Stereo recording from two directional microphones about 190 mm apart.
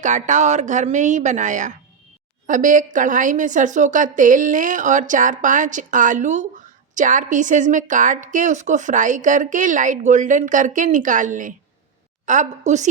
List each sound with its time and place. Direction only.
0.0 s a woman's voice: 40° right (ahead or behind)